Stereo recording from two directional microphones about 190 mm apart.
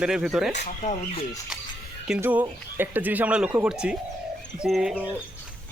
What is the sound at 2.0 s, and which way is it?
Speech, 5° right (ahead or behind).